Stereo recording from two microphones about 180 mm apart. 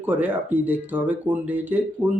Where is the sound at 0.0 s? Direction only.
10° right (ahead or behind).